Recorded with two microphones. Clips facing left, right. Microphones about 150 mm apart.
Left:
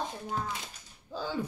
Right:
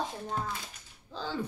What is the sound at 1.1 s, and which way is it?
Speech, 10° left (ahead or behind).